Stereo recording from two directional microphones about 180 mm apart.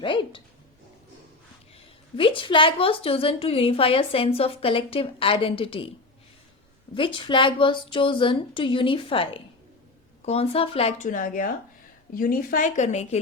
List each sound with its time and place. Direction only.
0.0 s a sound: 30° left (ahead or behind)
2.1 s a woman's voice: 30° left (ahead or behind)
6.9 s a woman's voice: 30° left (ahead or behind)